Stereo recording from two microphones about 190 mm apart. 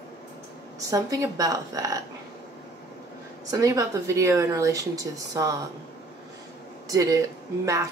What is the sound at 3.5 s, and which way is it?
Speech, 20° right (ahead or behind).